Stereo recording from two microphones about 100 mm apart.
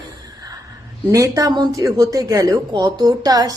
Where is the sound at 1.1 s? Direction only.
35° right (ahead or behind).